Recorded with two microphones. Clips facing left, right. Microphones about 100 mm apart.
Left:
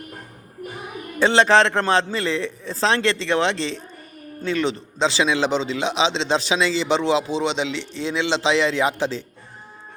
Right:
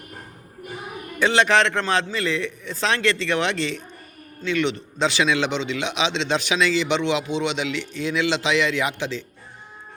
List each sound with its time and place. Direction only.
1.2 s a man's voice: 30° left (ahead or behind)